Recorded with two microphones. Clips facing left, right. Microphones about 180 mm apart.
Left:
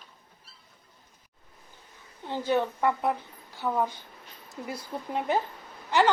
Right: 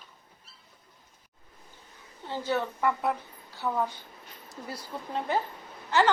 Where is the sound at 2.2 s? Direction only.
15° left (ahead or behind).